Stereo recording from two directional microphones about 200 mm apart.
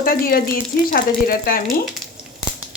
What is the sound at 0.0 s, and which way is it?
Speech, 45° left (ahead or behind).